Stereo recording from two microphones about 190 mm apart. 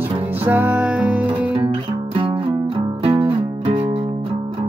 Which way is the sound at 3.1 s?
30° right (ahead or behind).